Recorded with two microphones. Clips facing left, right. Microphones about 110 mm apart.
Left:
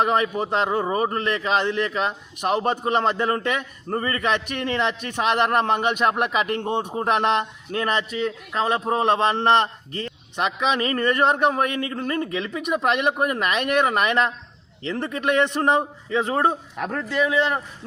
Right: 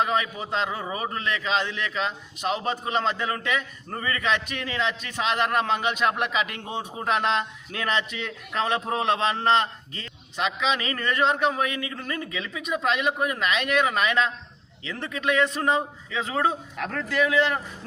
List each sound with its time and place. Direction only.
0.0 s a man's voice: 50° left (ahead or behind)
3.8 s a man's voice: 40° left (ahead or behind); by 7.4 s 55° left (ahead or behind)
7.7 s a man's voice: 45° left (ahead or behind)
9.0 s a man's voice: 50° left (ahead or behind)
10.3 s a man's voice: 50° left (ahead or behind)
12.6 s a man's voice: 55° left (ahead or behind)
15.2 s speech: 55° left (ahead or behind)
16.0 s a man's voice: 40° left (ahead or behind)
16.9 s speech: 25° left (ahead or behind)